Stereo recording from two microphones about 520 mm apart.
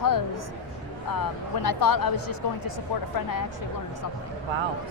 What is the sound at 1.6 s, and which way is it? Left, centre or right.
Speech, left.